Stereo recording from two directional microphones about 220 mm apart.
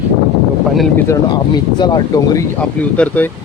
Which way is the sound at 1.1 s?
20° left (ahead or behind).